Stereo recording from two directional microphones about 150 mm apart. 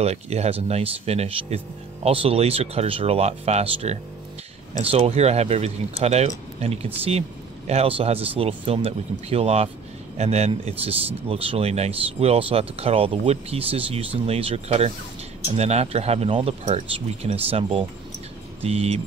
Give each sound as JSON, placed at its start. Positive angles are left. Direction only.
{"t": 0.0, "sound": "speech", "side_deg": -45}